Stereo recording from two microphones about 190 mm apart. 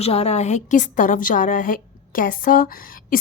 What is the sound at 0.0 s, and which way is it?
A woman's voice, 30° left (ahead or behind).